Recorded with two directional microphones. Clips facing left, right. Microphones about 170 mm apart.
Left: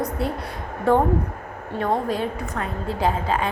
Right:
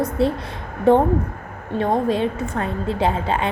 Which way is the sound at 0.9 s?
20° right (ahead or behind).